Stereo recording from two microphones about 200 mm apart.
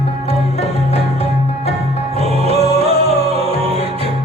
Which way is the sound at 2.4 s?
30° right (ahead or behind).